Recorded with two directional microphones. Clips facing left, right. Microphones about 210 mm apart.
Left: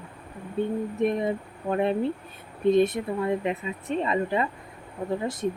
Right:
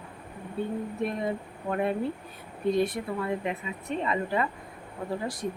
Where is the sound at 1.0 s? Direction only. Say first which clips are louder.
Left 6 dB; 20° left (ahead or behind).